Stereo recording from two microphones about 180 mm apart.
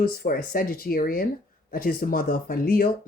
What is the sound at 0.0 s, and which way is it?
Speech, 55° left (ahead or behind).